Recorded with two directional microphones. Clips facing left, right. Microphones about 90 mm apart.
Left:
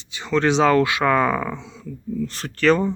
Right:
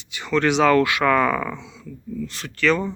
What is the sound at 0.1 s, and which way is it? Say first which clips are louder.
Speech: left 1 dB; 25° left (ahead or behind).